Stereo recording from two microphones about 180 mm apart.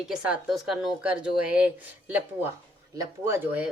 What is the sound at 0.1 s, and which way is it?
Speech, 5° right (ahead or behind).